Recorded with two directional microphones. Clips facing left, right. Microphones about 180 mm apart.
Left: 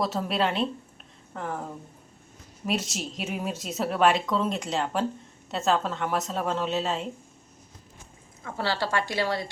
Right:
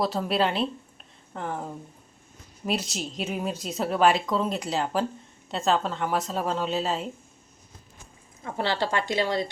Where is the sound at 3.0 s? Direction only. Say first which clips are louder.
Right 2 dB; centre (ahead or behind).